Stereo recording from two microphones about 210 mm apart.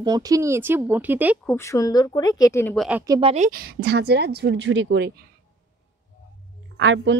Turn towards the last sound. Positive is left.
turn(degrees=-60)  # may be behind; listen again after turning